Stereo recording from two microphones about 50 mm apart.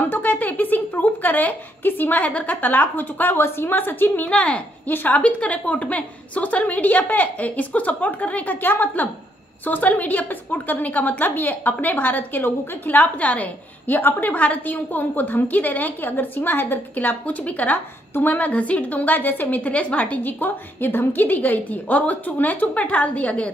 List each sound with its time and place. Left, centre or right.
0.0 s speech: left
4.3 s speech: left
4.9 s a woman's voice: left
5.2 s a woman's voice: left